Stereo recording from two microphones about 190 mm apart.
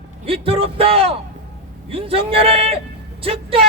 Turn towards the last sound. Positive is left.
turn(degrees=-30)  # may be behind; listen again after turning